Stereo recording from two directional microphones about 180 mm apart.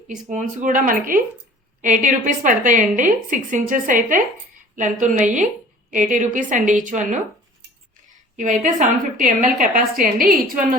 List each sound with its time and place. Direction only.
0.3 s a woman's voice: 45° right (ahead or behind)
8.4 s a woman's voice: 45° right (ahead or behind)